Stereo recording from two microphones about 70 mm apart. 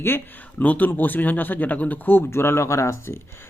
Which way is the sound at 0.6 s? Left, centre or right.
Left.